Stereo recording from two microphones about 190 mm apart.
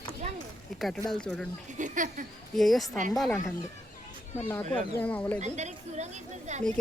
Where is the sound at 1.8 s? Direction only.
40° right (ahead or behind).